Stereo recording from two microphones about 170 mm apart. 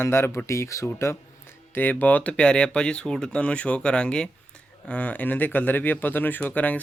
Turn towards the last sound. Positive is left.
turn(degrees=10)  # may be behind; listen again after turning